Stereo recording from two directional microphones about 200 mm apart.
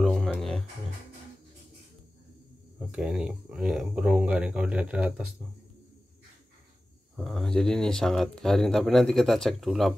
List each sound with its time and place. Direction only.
0.0 s music: centre (ahead or behind)
2.8 s speech: 5° right (ahead or behind)
7.2 s speech: centre (ahead or behind)